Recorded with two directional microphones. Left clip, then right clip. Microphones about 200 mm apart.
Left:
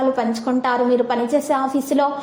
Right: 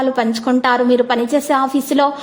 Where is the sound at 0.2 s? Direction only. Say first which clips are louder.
Right 4 dB; 35° right (ahead or behind).